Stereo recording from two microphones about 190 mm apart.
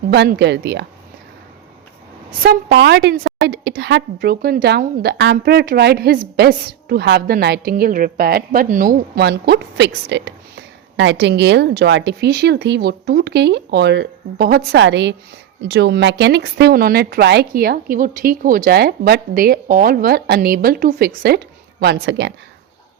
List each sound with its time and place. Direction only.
0.1 s a woman's voice: 60° right (ahead or behind)
2.4 s a woman's voice: 55° right (ahead or behind)